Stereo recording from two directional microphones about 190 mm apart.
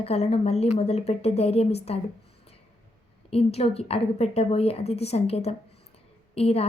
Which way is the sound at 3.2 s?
30° left (ahead or behind).